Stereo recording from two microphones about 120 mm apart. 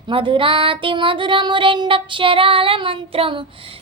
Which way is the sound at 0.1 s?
45° right (ahead or behind).